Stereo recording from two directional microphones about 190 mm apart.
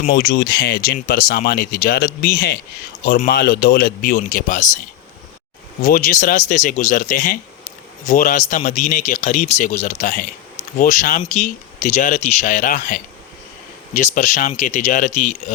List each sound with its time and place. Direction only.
0.0 s speech: 55° left (ahead or behind)
5.8 s a man's voice: 45° left (ahead or behind)